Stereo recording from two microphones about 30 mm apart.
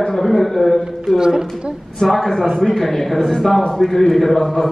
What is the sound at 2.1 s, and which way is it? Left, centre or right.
A man's voice, centre.